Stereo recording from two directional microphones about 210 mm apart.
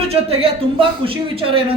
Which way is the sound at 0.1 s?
25° right (ahead or behind).